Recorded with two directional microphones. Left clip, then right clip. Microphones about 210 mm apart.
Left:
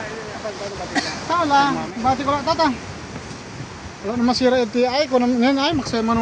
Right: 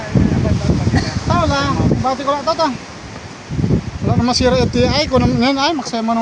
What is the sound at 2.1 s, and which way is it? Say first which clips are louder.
Speech: even; 35° right (ahead or behind).